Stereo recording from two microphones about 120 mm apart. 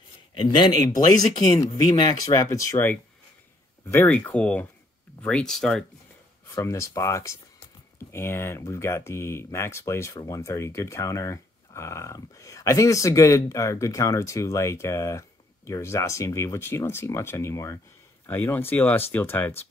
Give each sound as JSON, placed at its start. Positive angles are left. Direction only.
{"t": 0.3, "sound": "a man's voice", "side_deg": 40}
{"t": 6.4, "sound": "speech", "side_deg": 25}